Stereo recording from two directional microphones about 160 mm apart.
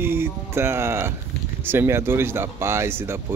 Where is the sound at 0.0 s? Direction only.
15° right (ahead or behind).